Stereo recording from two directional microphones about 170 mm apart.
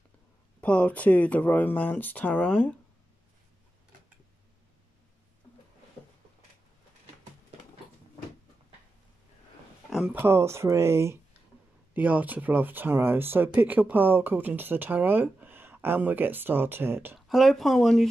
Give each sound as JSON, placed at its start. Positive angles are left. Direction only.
{"t": 0.6, "sound": "speech", "side_deg": 10}
{"t": 9.8, "sound": "a sound", "side_deg": 0}
{"t": 10.1, "sound": "speech", "side_deg": -15}
{"t": 17.3, "sound": "speech", "side_deg": 0}